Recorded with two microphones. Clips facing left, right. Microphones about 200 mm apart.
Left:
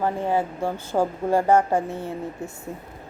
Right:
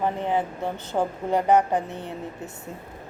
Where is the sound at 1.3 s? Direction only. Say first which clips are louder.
Left 1 dB; 20° right (ahead or behind).